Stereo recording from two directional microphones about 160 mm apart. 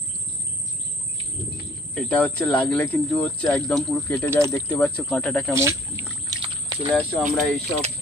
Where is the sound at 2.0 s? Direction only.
10° left (ahead or behind).